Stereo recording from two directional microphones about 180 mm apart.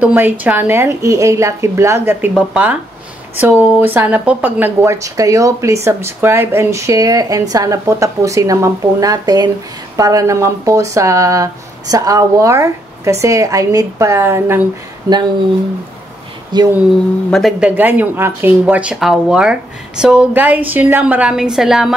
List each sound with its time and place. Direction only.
0.0 s speech: 10° right (ahead or behind)
16.5 s speech: 25° right (ahead or behind)
17.3 s speech: centre (ahead or behind)